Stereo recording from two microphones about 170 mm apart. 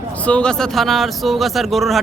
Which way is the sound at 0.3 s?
5° left (ahead or behind).